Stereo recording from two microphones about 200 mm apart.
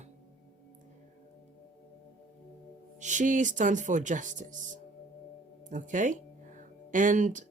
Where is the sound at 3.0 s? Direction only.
40° right (ahead or behind).